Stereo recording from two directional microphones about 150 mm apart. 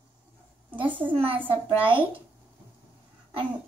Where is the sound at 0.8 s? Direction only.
10° right (ahead or behind).